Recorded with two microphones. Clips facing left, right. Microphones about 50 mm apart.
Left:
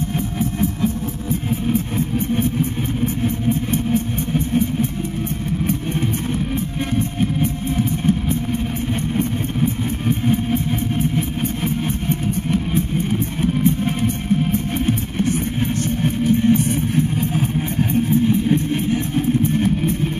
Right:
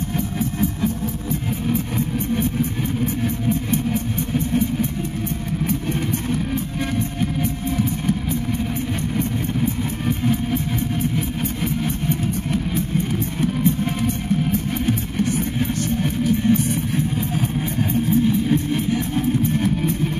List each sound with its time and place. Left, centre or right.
10.0 s vehicle: left
16.3 s music: left
18.5 s music: centre